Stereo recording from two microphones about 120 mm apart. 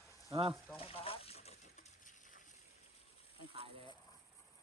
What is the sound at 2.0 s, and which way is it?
Crushing, 90° left.